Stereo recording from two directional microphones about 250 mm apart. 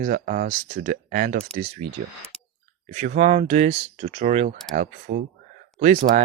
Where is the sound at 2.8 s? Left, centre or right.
Right.